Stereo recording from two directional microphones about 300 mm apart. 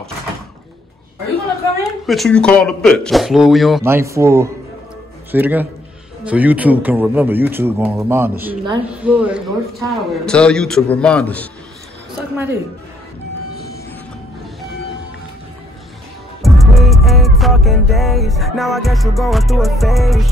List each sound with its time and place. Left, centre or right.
1.8 s a man's voice: centre
16.4 s music: centre